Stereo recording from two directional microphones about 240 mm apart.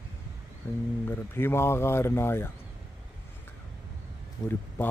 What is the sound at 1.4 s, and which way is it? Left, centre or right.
Speech, centre.